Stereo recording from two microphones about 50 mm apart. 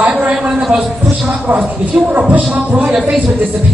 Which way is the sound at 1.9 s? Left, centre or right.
Right.